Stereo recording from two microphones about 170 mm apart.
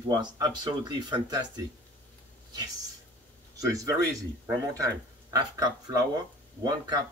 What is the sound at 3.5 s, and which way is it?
Speech, 20° right (ahead or behind).